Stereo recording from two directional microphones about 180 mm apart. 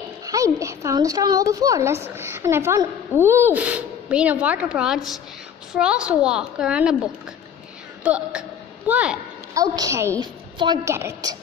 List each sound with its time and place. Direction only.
0.2 s a woman's voice: 20° right (ahead or behind)
9.5 s a woman's voice: 15° right (ahead or behind)